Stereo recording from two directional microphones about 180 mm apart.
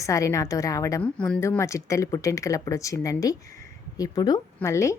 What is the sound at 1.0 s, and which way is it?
A woman's voice, 5° left (ahead or behind).